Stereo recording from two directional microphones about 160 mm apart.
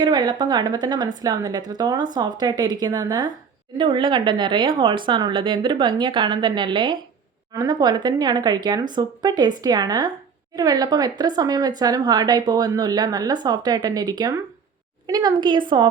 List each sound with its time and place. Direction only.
0.0 s a woman's voice: 25° right (ahead or behind)